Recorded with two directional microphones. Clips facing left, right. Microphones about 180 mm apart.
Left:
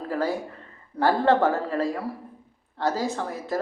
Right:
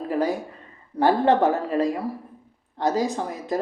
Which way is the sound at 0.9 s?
15° right (ahead or behind).